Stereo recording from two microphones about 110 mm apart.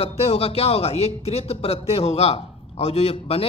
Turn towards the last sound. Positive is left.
turn(degrees=65)  # may be behind; listen again after turning